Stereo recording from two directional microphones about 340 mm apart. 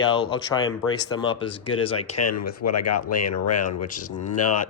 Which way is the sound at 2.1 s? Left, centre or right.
Left.